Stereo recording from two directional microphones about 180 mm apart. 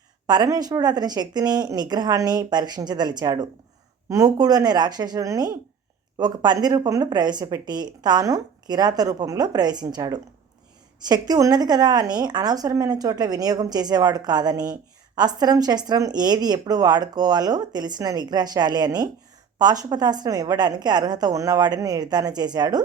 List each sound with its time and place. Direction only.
0.3 s speech: 20° right (ahead or behind)